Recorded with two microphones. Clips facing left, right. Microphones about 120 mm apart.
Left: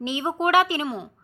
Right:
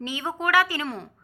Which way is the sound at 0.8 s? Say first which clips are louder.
Left 3 dB; 5° left (ahead or behind).